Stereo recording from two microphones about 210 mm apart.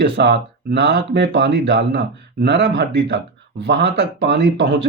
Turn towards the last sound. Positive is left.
turn(degrees=-55)  # may be behind; listen again after turning